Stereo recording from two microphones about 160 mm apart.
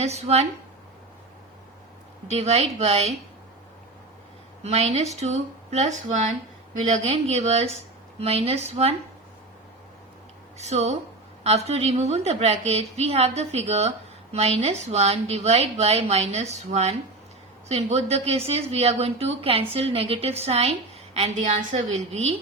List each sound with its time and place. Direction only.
0.0 s speech: 40° right (ahead or behind)
2.3 s a woman's voice: 40° right (ahead or behind)
4.6 s a woman's voice: 40° right (ahead or behind)
10.6 s a woman's voice: 45° right (ahead or behind)